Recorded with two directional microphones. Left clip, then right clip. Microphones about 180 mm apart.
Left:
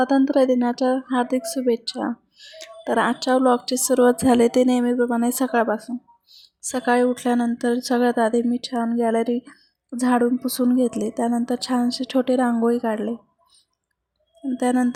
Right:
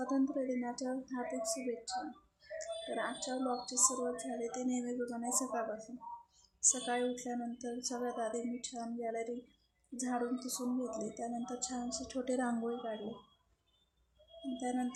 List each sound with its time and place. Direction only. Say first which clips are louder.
0.0 s a woman's voice: left 18 dB; 50° left (ahead or behind)
14.5 s speech: left 17 dB; 55° left (ahead or behind)